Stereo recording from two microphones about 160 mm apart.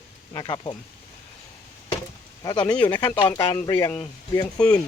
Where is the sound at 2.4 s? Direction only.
25° left (ahead or behind).